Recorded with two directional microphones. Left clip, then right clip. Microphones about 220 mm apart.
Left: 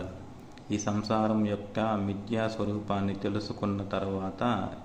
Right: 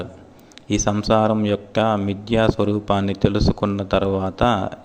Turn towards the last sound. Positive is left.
turn(degrees=-35)  # may be behind; listen again after turning